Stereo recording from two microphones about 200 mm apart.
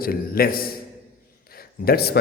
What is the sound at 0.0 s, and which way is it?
A man's voice, 50° left (ahead or behind).